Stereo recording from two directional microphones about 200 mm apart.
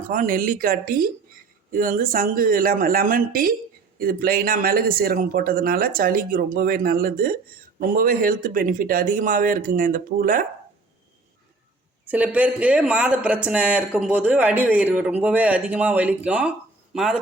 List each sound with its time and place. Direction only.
0.1 s speech: 45° right (ahead or behind)
12.0 s speech: 10° right (ahead or behind)